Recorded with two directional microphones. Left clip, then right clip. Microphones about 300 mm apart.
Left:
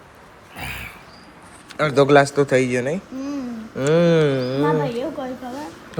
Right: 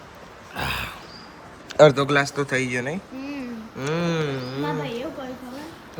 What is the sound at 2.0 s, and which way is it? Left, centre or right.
A woman's voice, centre.